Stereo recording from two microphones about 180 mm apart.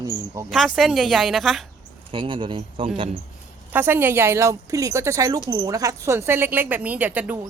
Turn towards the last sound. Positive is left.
turn(degrees=-10)  # may be behind; listen again after turning